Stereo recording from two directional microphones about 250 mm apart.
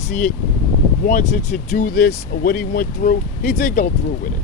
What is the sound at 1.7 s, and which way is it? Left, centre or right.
Speech, left.